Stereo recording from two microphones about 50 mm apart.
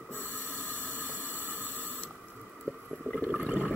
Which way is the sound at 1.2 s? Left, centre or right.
Right.